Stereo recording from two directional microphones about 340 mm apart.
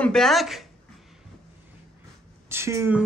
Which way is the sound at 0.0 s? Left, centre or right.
Centre.